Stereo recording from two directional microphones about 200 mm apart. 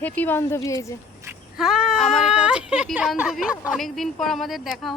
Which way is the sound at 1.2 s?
5° right (ahead or behind).